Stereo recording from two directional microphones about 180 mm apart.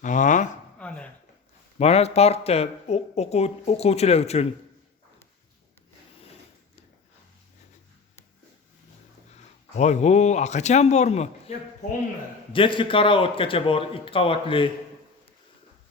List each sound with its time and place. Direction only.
0.0 s speech: 45° left (ahead or behind)
0.8 s a sound: 5° left (ahead or behind)
1.8 s speech: 35° left (ahead or behind)
9.3 s speech: 40° left (ahead or behind)
12.5 s a man's voice: 30° left (ahead or behind)